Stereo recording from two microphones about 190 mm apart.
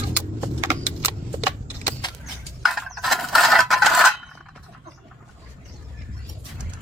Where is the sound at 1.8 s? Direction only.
25° left (ahead or behind).